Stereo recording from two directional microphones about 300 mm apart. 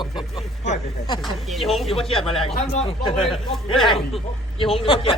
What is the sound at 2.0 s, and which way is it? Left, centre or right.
Speech, centre.